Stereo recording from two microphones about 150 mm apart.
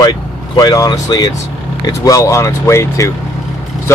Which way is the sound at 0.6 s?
25° left (ahead or behind).